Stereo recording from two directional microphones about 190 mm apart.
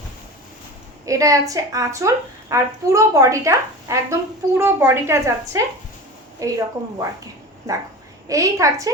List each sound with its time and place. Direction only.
1.0 s a woman's voice: 15° right (ahead or behind)
7.7 s a woman's voice: 15° right (ahead or behind)